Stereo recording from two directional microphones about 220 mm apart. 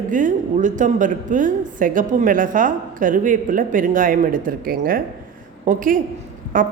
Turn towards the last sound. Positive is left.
turn(degrees=-40)  # may be behind; listen again after turning